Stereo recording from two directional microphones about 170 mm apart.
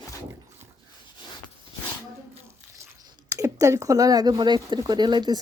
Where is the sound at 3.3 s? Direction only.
20° right (ahead or behind).